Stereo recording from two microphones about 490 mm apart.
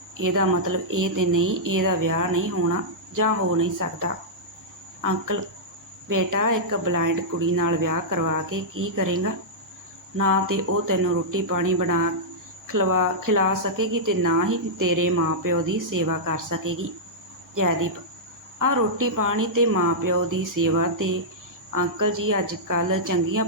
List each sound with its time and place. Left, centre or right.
0.2 s speech: right